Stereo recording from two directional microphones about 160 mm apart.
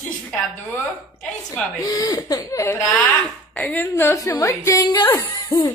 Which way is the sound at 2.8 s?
5° left (ahead or behind).